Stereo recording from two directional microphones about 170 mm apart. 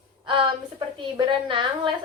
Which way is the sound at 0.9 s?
30° right (ahead or behind).